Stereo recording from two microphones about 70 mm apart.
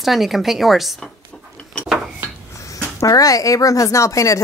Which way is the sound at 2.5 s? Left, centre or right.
Left.